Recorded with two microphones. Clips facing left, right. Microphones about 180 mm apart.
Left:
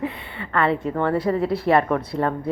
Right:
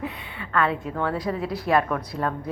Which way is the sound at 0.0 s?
65° left (ahead or behind).